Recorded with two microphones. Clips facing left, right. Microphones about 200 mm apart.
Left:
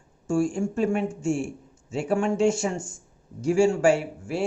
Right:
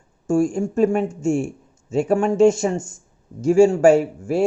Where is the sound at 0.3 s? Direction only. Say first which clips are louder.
Right 5 dB; 40° right (ahead or behind).